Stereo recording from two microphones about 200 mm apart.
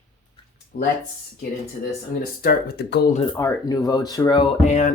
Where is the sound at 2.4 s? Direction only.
45° left (ahead or behind).